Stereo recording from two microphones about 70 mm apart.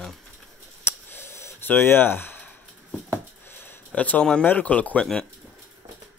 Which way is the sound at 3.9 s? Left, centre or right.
Centre.